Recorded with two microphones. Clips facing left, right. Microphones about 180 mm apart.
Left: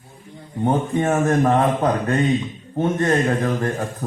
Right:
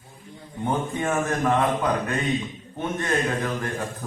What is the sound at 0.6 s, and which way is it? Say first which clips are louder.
Speech: left 6 dB; 35° left (ahead or behind).